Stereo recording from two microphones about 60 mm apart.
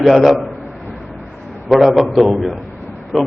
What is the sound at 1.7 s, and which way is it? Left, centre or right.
A man's voice, centre.